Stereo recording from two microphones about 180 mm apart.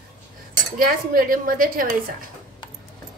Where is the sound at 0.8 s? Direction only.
50° right (ahead or behind).